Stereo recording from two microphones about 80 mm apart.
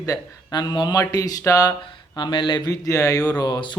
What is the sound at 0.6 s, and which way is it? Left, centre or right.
Speech, left.